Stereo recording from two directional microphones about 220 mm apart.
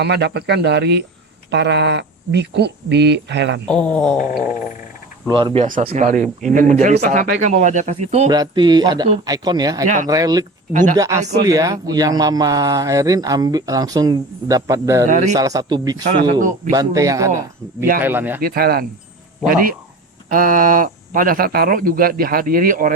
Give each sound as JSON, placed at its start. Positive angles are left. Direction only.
{"t": 0.0, "sound": "speech", "side_deg": -50}
{"t": 3.7, "sound": "a sound", "side_deg": 5}
{"t": 5.3, "sound": "speech", "side_deg": -20}
{"t": 8.3, "sound": "speech", "side_deg": -20}
{"t": 9.8, "sound": "speech", "side_deg": -35}
{"t": 10.1, "sound": "speech", "side_deg": -15}
{"t": 10.7, "sound": "speech", "side_deg": -35}
{"t": 10.9, "sound": "speech", "side_deg": -15}
{"t": 15.1, "sound": "speech", "side_deg": -30}
{"t": 15.4, "sound": "speech", "side_deg": -15}
{"t": 18.3, "sound": "speech", "side_deg": -40}
{"t": 20.3, "sound": "speech", "side_deg": -40}